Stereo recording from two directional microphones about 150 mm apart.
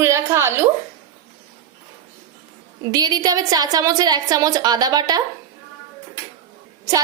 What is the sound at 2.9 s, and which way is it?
A woman's voice, 25° right (ahead or behind).